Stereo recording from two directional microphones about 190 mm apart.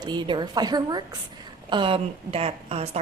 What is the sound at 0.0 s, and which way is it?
A woman's voice, 25° right (ahead or behind).